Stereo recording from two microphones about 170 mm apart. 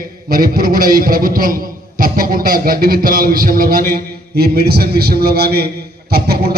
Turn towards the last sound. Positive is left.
turn(degrees=-70)  # may be behind; listen again after turning